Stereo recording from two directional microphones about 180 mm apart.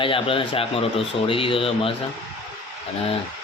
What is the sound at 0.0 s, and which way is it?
Speech, 30° left (ahead or behind).